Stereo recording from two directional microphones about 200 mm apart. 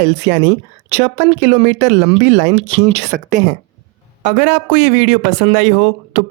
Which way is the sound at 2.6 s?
35° right (ahead or behind).